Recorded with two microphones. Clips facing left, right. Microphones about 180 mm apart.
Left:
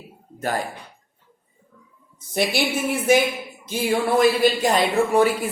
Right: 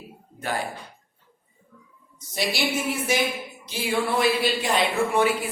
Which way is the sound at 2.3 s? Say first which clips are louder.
Left 5 dB; 55° left (ahead or behind).